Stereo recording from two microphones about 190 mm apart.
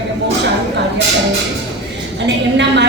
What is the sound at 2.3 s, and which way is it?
Speech, 65° right (ahead or behind).